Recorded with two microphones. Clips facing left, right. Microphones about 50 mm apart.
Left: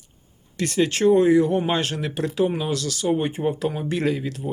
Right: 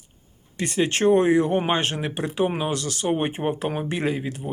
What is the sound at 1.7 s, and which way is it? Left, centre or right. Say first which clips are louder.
Speech: even; right.